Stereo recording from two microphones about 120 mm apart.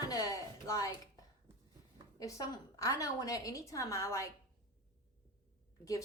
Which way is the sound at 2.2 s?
30° left (ahead or behind).